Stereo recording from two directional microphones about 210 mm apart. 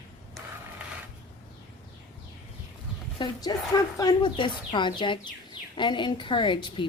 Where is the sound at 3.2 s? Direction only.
20° left (ahead or behind).